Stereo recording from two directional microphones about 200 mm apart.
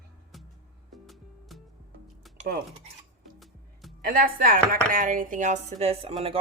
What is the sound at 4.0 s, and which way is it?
Speech, 45° right (ahead or behind).